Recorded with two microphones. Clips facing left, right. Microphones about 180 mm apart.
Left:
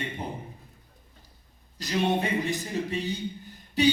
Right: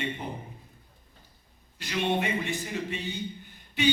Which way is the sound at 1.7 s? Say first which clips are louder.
Left 2 dB; 40° left (ahead or behind).